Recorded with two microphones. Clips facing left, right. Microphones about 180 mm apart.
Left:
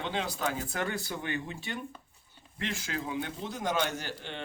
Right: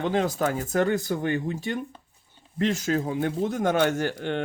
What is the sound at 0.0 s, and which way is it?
Speech, 45° right (ahead or behind).